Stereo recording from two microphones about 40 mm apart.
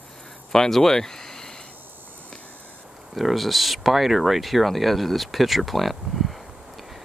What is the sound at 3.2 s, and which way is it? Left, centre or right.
Speech, centre.